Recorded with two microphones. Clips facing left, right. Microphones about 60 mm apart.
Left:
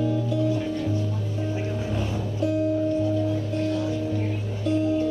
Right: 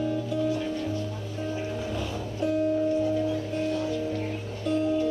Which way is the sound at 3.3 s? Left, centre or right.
Centre.